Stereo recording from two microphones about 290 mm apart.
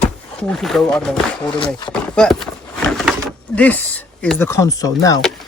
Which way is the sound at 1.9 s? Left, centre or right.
Centre.